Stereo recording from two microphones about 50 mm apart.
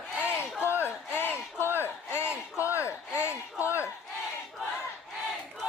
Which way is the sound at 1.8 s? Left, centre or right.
Left.